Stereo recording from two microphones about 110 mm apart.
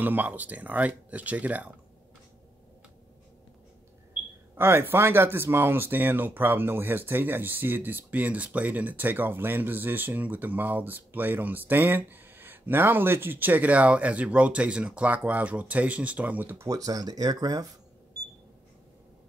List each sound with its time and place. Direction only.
0.0 s speech: 15° right (ahead or behind)
4.6 s speech: 20° right (ahead or behind)
16.6 s speech: 35° right (ahead or behind)